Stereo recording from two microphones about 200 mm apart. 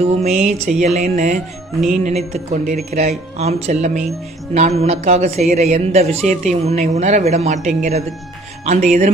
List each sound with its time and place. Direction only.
0.0 s a man's voice: 35° right (ahead or behind)